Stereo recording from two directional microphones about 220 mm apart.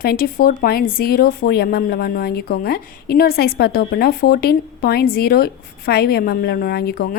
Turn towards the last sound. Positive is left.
turn(degrees=45)  # may be behind; listen again after turning